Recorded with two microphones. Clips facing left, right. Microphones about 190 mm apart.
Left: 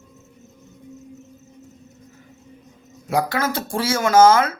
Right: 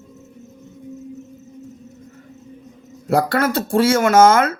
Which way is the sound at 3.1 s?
60° right (ahead or behind).